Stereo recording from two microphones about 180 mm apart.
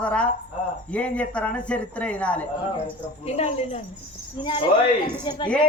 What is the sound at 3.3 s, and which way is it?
Speech, 35° left (ahead or behind).